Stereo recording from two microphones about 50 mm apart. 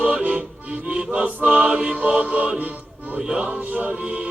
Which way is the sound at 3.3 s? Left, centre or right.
Centre.